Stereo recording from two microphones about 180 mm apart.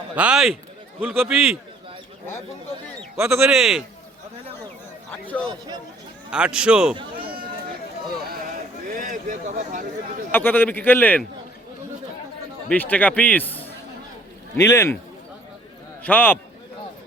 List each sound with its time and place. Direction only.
0.2 s a man's voice: 5° right (ahead or behind)
3.2 s speech: 15° right (ahead or behind)
3.5 s a man's voice: centre (ahead or behind)
5.1 s speech: 10° left (ahead or behind)
6.3 s a man's voice: 5° right (ahead or behind)
8.9 s speech: 50° right (ahead or behind)
10.3 s speech: 10° left (ahead or behind)
12.6 s speech: 10° left (ahead or behind)
16.0 s speech: 10° left (ahead or behind)